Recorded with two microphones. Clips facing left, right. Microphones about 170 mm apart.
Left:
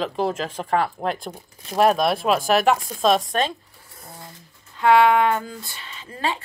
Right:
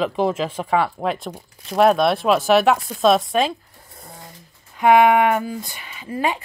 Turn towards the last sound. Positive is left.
turn(degrees=-15)  # may be behind; listen again after turning